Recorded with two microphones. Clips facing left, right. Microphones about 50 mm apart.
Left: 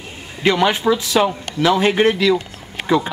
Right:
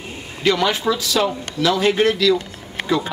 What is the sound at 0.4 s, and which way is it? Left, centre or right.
Speech, left.